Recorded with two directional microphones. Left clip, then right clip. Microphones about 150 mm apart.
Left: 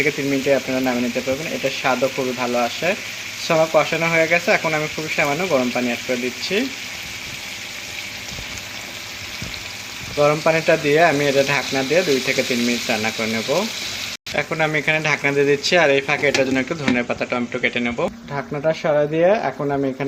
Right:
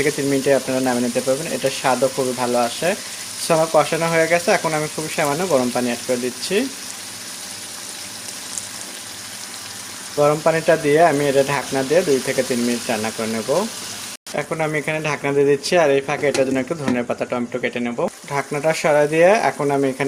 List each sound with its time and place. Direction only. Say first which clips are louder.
0.0 s frying: right 1 dB; 40° right (ahead or behind)
10.2 s speech: even; 25° right (ahead or behind)
18.3 s frying: right 2 dB; 35° right (ahead or behind)